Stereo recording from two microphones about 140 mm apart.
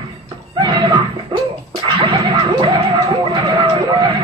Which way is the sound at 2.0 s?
35° right (ahead or behind).